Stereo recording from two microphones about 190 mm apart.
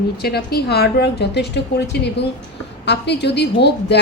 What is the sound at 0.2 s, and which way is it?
A woman's voice, 55° left (ahead or behind).